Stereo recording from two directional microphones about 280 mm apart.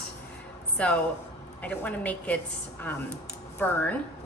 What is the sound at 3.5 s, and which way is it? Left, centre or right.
Speech, centre.